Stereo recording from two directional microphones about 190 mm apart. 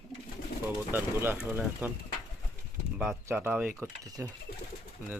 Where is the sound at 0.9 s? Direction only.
10° right (ahead or behind).